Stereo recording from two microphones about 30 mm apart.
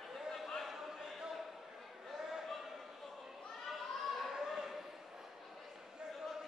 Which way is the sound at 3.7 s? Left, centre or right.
Centre.